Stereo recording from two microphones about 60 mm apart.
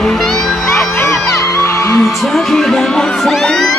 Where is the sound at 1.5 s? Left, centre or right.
Left.